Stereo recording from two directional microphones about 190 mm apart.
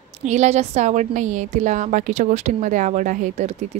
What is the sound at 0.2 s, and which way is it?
Speech, 35° right (ahead or behind).